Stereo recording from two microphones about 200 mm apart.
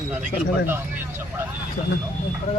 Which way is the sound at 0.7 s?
10° right (ahead or behind).